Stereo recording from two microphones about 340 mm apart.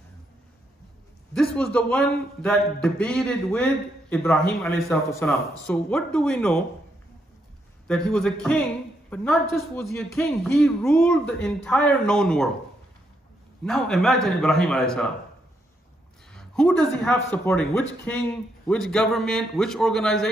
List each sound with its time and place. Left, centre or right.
1.3 s a man's voice: centre
7.8 s a man's voice: centre
13.7 s a man's voice: centre
16.3 s a man's voice: centre